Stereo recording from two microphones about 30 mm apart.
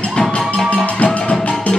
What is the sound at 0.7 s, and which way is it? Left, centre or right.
Music, left.